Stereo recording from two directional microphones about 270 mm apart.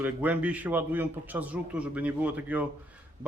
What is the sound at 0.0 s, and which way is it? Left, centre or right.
A man's voice, centre.